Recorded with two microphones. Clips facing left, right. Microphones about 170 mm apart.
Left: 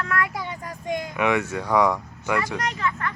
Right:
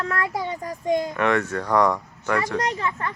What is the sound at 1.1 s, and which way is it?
Speech, 10° left (ahead or behind).